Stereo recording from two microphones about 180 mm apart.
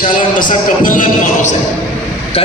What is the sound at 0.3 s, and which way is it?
A man's voice, 50° left (ahead or behind).